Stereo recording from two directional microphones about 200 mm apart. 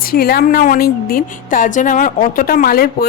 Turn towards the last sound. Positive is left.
turn(degrees=50)  # may be behind; listen again after turning